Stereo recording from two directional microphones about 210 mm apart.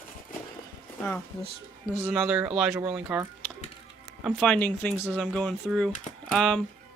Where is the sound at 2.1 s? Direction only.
5° right (ahead or behind).